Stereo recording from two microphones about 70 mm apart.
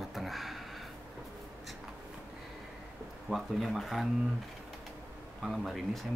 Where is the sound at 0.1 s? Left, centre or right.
Centre.